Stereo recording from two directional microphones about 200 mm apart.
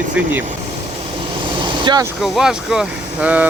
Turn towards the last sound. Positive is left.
turn(degrees=-5)  # may be behind; listen again after turning